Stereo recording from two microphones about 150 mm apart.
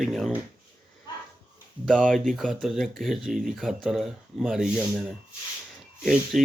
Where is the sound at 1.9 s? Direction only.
Centre (ahead or behind).